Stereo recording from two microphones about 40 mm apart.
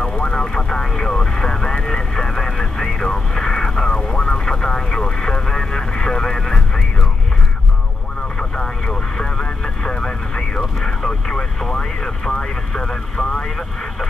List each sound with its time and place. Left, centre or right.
0.2 s vehicle: centre
8.4 s vehicle: left
10.6 s vehicle: centre